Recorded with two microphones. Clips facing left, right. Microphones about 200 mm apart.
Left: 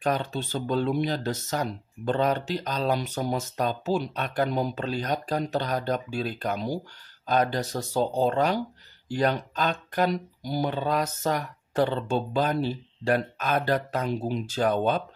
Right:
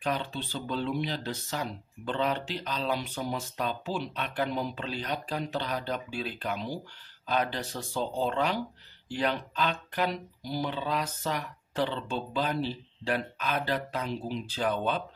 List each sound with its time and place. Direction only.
0.0 s speech: 45° left (ahead or behind)